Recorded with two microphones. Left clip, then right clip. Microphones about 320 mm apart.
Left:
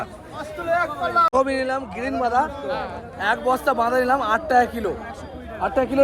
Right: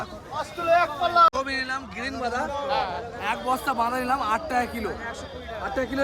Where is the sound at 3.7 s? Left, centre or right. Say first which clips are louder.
Left 5 dB; centre.